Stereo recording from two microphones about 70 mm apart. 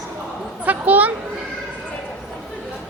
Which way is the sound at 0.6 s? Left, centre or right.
Right.